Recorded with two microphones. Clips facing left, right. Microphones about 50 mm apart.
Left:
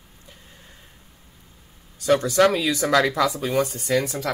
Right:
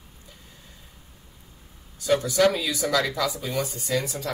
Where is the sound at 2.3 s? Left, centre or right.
Left.